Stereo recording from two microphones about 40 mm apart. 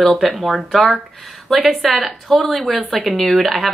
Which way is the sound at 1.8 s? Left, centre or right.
Centre.